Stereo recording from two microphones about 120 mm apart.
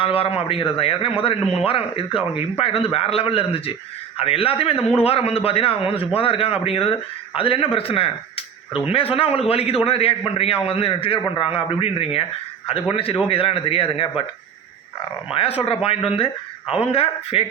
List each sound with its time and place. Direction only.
0.0 s a man's voice: 50° left (ahead or behind)
15.3 s a man's voice: 55° left (ahead or behind)